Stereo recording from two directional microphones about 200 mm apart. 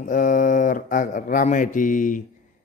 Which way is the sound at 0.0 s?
40° left (ahead or behind).